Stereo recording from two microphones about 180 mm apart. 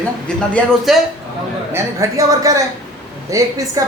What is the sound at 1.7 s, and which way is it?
A man's voice, 15° right (ahead or behind).